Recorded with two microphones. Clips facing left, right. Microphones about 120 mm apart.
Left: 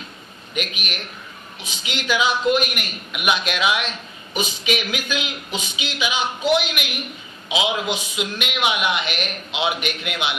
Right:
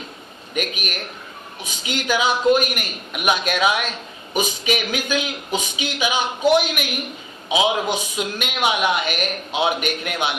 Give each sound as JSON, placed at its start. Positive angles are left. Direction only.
{"t": 0.5, "sound": "a man's voice", "side_deg": -45}